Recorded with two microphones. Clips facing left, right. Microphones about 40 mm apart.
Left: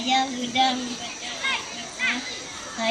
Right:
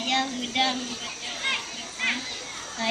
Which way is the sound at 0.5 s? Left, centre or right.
Centre.